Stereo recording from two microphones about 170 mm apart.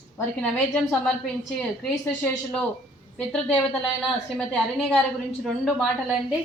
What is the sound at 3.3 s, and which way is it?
A woman's voice, 5° left (ahead or behind).